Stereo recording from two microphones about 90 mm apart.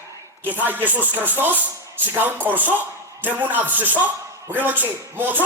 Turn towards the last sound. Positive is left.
turn(degrees=-20)  # may be behind; listen again after turning